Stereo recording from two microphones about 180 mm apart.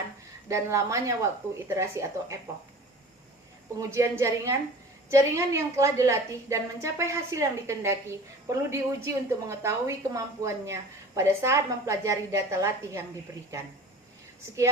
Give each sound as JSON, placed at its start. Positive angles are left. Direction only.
{"t": 0.4, "sound": "a woman's voice", "side_deg": -15}
{"t": 3.8, "sound": "a woman's voice", "side_deg": -15}